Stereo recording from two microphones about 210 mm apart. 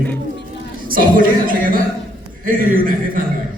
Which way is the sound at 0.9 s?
40° right (ahead or behind).